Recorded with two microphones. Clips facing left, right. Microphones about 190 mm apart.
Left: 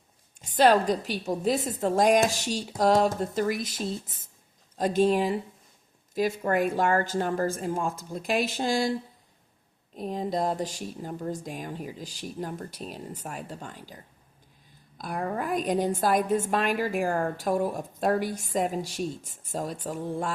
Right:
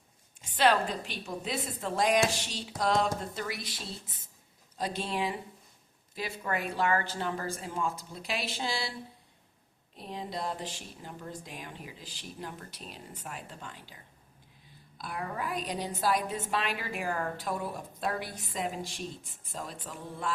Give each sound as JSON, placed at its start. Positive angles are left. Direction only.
{"t": 0.4, "sound": "a woman's voice", "side_deg": 40}